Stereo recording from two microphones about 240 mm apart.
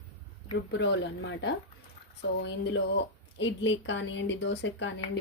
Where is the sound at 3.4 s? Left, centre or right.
Left.